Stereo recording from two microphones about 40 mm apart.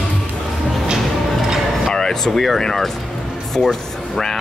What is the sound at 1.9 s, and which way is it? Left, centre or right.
Air conditioning, centre.